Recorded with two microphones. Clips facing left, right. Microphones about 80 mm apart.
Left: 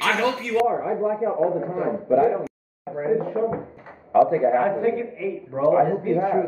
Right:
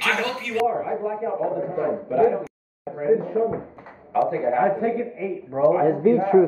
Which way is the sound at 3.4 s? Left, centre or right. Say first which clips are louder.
Right 1 dB; centre.